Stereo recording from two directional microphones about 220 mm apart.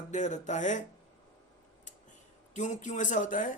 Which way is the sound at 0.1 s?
35° left (ahead or behind).